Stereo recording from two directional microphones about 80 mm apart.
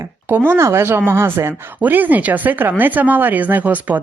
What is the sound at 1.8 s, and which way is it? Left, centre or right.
A woman's voice, right.